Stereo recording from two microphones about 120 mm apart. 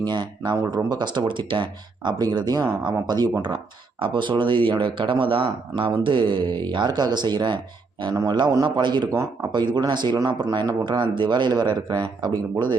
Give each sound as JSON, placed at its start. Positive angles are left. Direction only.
{"t": 0.0, "sound": "speech", "side_deg": -40}